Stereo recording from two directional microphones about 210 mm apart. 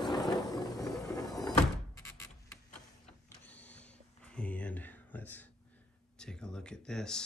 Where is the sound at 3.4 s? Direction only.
5° left (ahead or behind).